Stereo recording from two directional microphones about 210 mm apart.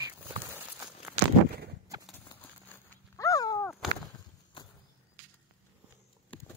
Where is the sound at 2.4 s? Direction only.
10° left (ahead or behind).